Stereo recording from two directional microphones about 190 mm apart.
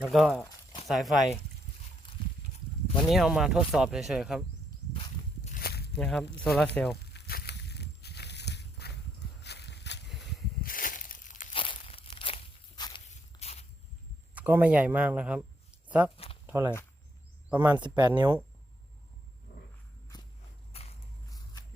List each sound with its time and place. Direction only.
0.0 s speech: centre (ahead or behind)
3.1 s speech: centre (ahead or behind)
5.5 s walk: 55° left (ahead or behind)
6.0 s speech: 5° left (ahead or behind)
7.0 s a sound: 55° left (ahead or behind)
9.4 s walk: 60° left (ahead or behind)
10.6 s a sound: 50° left (ahead or behind)
11.5 s crunch: 30° left (ahead or behind)
13.1 s walk: 35° left (ahead or behind)
14.3 s speech: 10° right (ahead or behind)
16.1 s a sound: 30° left (ahead or behind)
16.5 s speech: 15° right (ahead or behind)
17.7 s speech: 25° right (ahead or behind)
20.7 s walk: 30° left (ahead or behind)